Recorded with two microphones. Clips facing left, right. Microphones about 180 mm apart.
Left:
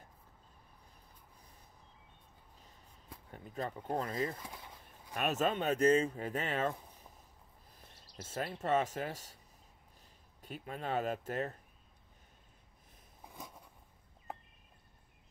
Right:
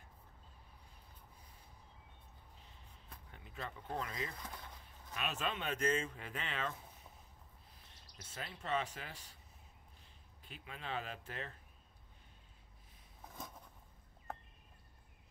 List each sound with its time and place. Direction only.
3.3 s speech: 40° left (ahead or behind)
4.4 s speech: 10° left (ahead or behind)
5.1 s speech: 45° left (ahead or behind)
8.2 s speech: 50° left (ahead or behind)
10.4 s speech: 45° left (ahead or behind)